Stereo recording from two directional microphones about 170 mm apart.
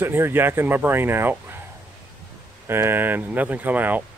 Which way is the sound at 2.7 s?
15° right (ahead or behind).